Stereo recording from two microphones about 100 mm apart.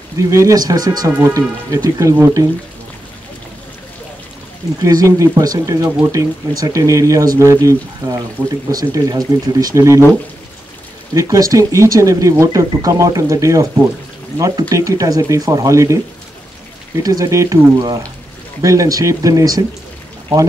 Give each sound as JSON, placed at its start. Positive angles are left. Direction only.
{"t": 0.3, "sound": "speech", "side_deg": -35}
{"t": 4.8, "sound": "speech", "side_deg": -35}
{"t": 11.1, "sound": "speech", "side_deg": -35}
{"t": 17.0, "sound": "speech", "side_deg": -35}